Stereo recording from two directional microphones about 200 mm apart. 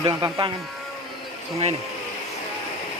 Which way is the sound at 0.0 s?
20° right (ahead or behind).